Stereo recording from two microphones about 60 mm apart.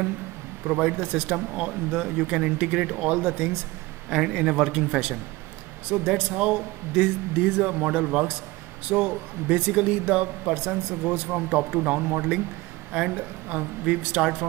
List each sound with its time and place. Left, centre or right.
0.7 s speech: centre
1.6 s speech: centre
3.1 s speech: right
4.1 s speech: centre